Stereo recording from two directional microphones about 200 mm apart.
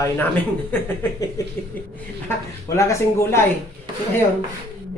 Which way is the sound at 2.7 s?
15° left (ahead or behind).